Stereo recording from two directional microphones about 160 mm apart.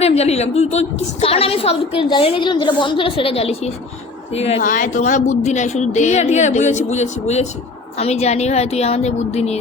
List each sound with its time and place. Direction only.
0.0 s a woman's voice: 40° left (ahead or behind)
4.6 s a woman's voice: 55° left (ahead or behind)